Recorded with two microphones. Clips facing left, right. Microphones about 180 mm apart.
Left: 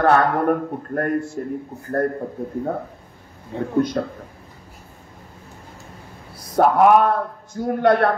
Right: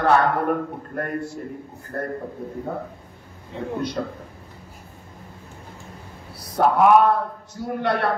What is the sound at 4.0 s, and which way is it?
Speech, 50° left (ahead or behind).